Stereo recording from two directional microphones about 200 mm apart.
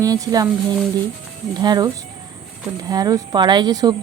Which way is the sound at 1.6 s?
20° right (ahead or behind).